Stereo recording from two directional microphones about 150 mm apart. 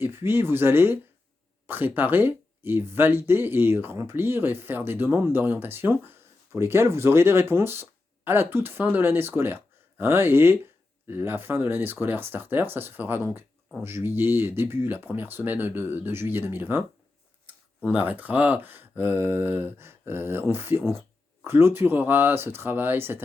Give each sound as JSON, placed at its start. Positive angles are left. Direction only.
{"t": 0.0, "sound": "speech", "side_deg": -15}
{"t": 17.8, "sound": "speech", "side_deg": -10}